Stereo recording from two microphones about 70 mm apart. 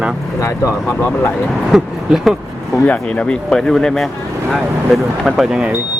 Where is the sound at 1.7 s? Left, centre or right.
Centre.